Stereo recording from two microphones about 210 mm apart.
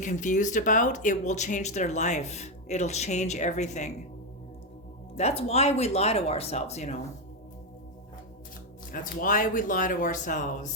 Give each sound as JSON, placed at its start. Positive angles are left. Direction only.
{"t": 0.0, "sound": "speech", "side_deg": 35}
{"t": 5.1, "sound": "speech", "side_deg": 30}
{"t": 8.9, "sound": "speech", "side_deg": 40}